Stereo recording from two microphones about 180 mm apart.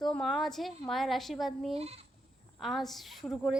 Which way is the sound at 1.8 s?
35° right (ahead or behind).